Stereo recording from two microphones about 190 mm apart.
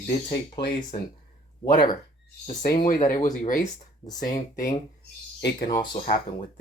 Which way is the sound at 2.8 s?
40° left (ahead or behind).